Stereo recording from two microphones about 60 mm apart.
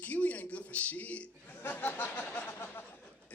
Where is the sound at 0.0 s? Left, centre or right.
Left.